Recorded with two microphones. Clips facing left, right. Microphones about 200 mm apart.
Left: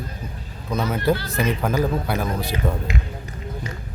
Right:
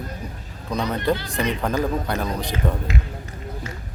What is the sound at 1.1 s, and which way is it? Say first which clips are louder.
Speech: left 1 dB; 15° right (ahead or behind).